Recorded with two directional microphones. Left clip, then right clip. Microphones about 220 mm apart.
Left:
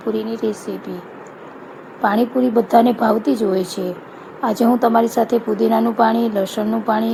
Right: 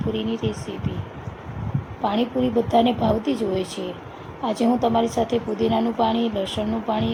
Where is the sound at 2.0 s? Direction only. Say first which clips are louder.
Left 6 dB; 20° left (ahead or behind).